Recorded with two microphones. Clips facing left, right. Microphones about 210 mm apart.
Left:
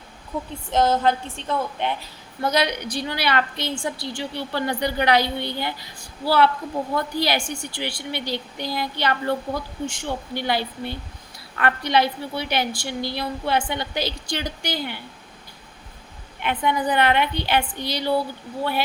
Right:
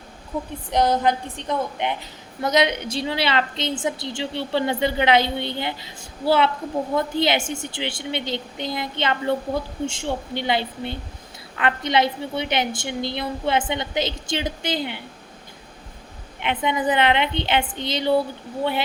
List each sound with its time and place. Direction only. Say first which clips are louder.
0.7 s a woman's voice: even; 15° right (ahead or behind)
16.4 s a woman's voice: even; 20° right (ahead or behind)